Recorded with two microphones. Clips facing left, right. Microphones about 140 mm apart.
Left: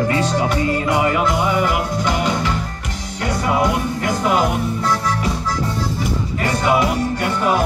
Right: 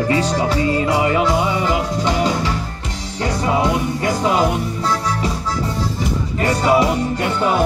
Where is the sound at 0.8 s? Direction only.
30° right (ahead or behind).